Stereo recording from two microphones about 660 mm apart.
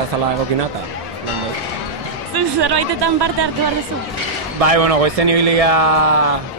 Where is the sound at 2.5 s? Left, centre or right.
Right.